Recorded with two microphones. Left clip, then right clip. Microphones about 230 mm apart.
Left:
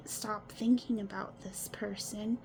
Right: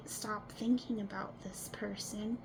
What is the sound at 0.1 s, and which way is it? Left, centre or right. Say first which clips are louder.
Speech: left 2 dB; left.